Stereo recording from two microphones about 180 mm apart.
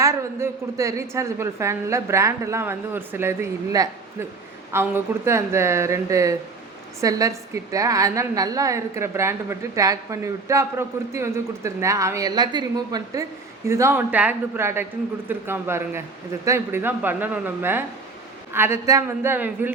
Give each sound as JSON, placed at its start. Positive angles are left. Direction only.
{"t": 0.0, "sound": "a woman's voice", "side_deg": -15}